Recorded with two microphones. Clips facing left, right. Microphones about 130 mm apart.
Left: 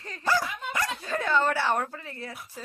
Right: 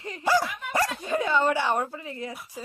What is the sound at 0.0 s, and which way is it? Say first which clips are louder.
Dog: right 3 dB; 20° right (ahead or behind).